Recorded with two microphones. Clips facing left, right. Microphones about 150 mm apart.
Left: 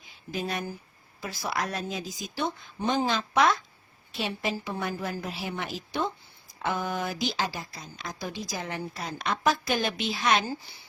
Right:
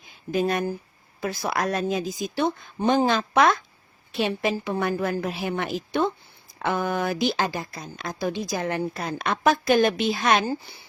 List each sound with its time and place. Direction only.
0.3 s a woman's voice: 55° right (ahead or behind)